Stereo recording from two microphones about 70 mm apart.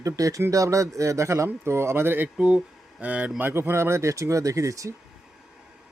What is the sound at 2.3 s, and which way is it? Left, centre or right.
Speech, centre.